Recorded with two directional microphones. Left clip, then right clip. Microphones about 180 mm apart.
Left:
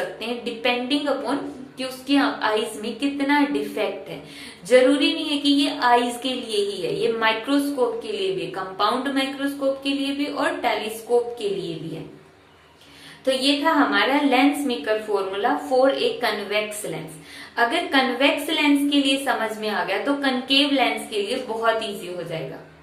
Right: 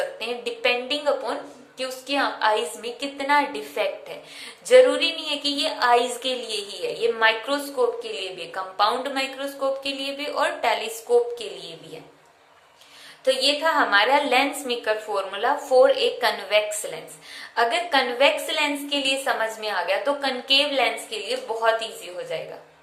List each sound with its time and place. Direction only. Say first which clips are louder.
0.2 s a woman's voice: even; 35° right (ahead or behind)
13.2 s a woman's voice: even; 40° right (ahead or behind)